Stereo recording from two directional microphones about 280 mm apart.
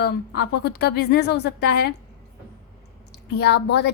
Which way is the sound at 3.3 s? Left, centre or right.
Left.